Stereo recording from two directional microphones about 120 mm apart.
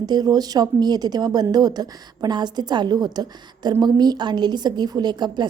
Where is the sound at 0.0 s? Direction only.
35° right (ahead or behind).